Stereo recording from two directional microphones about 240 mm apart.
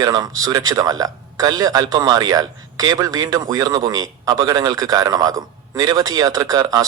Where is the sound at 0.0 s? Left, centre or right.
Centre.